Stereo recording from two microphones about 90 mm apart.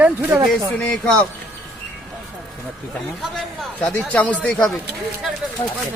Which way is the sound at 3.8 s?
15° left (ahead or behind).